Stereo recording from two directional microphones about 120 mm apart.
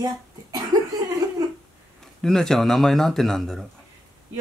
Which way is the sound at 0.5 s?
30° right (ahead or behind).